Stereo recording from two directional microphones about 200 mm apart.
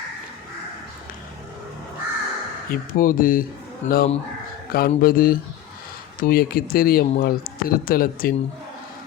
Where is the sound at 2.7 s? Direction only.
45° left (ahead or behind).